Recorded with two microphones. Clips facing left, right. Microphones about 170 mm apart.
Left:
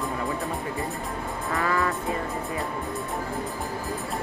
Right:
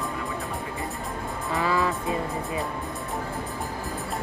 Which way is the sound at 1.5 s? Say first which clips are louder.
Right 1 dB; 15° right (ahead or behind).